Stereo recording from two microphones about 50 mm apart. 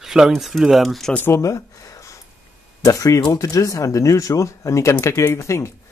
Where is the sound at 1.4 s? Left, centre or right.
Left.